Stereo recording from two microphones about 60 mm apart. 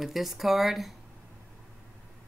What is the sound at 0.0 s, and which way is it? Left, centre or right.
Speech, centre.